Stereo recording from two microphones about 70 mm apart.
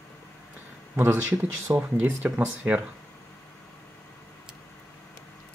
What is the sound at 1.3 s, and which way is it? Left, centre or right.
Speech, right.